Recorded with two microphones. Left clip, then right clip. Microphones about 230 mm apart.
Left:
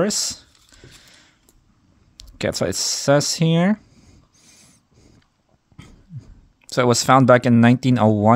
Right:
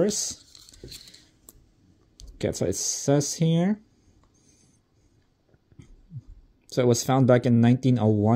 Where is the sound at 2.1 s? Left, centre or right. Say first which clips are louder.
Left 6 dB; left.